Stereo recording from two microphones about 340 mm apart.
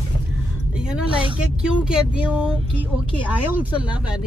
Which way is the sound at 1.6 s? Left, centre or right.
Centre.